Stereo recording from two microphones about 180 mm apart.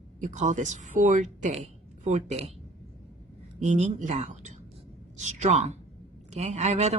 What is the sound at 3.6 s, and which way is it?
A woman's voice, 40° right (ahead or behind).